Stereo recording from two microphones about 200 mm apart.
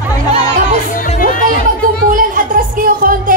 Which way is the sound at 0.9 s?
45° left (ahead or behind).